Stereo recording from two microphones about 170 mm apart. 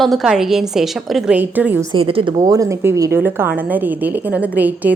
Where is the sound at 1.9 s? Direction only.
30° right (ahead or behind); by 4.9 s 10° right (ahead or behind).